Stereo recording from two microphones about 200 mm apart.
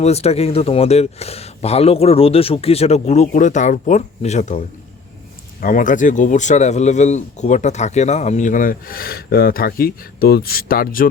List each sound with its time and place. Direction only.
0.0 s speech: 30° left (ahead or behind)